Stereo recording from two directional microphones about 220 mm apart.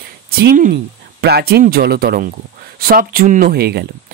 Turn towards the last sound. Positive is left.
turn(degrees=-45)  # may be behind; listen again after turning